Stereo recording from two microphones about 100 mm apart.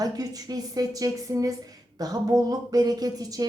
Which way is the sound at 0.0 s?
40° right (ahead or behind).